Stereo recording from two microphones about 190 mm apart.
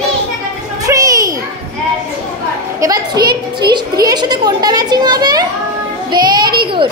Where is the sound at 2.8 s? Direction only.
20° right (ahead or behind).